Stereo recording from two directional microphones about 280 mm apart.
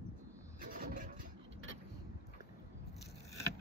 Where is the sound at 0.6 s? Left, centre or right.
Right.